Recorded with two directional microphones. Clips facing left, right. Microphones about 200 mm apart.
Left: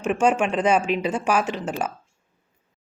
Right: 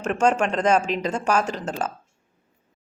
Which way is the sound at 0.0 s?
10° left (ahead or behind).